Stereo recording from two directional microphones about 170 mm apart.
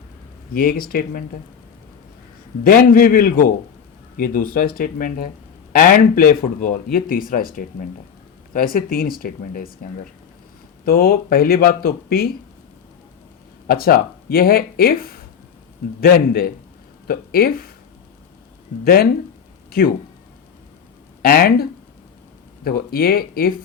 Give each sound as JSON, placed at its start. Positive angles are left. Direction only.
{"t": 0.5, "sound": "speech", "side_deg": 60}
{"t": 2.6, "sound": "speech", "side_deg": 55}
{"t": 13.7, "sound": "speech", "side_deg": 60}
{"t": 21.2, "sound": "speech", "side_deg": 60}